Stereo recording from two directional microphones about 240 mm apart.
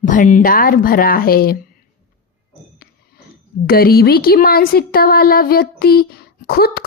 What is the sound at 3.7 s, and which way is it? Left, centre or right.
Speech, left.